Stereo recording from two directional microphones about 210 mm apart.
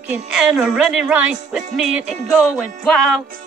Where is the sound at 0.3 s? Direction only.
5° right (ahead or behind).